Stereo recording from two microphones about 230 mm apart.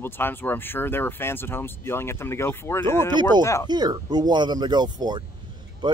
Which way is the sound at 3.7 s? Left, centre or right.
Centre.